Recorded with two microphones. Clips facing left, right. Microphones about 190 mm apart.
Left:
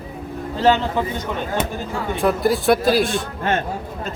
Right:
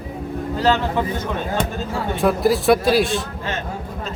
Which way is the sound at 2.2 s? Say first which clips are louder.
Right 1 dB; centre (ahead or behind).